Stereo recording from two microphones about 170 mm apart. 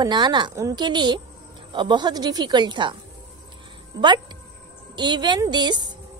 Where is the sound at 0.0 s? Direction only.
25° right (ahead or behind).